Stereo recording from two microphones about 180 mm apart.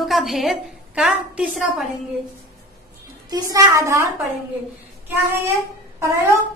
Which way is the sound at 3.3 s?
20° right (ahead or behind).